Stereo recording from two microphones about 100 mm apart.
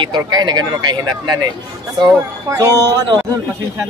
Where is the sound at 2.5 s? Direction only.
35° right (ahead or behind).